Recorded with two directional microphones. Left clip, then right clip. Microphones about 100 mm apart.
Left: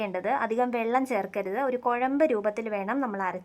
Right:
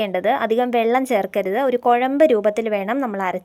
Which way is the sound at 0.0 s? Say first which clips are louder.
Right 8 dB; 30° right (ahead or behind).